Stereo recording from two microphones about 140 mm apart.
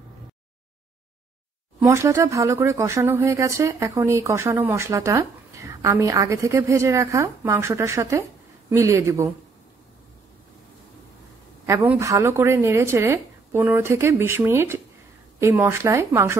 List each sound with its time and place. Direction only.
1.8 s speech: 20° right (ahead or behind)
11.6 s speech: 15° right (ahead or behind)